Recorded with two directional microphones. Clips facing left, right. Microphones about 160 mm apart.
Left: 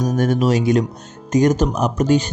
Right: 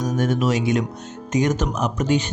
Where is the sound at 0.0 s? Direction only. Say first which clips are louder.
Left 3 dB; 40° left (ahead or behind).